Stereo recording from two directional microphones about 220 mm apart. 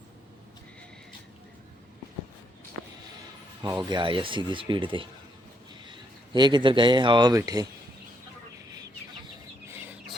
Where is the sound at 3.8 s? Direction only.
20° right (ahead or behind).